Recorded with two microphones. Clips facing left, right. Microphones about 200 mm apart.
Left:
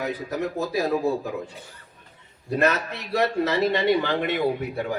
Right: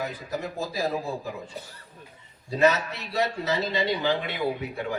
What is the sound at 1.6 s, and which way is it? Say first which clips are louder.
Speech: right 4 dB; 40° right (ahead or behind).